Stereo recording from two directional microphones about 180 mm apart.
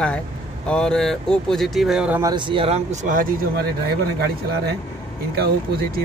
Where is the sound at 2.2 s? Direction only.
25° right (ahead or behind).